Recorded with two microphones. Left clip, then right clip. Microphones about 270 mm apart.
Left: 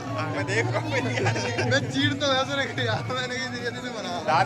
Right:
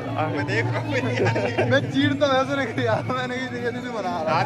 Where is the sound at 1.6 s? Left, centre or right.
Centre.